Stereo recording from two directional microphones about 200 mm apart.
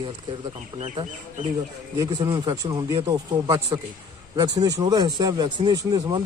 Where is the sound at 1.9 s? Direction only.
20° right (ahead or behind).